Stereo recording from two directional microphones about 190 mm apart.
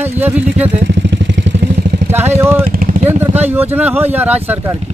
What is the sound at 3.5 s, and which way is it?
Speech, 10° right (ahead or behind).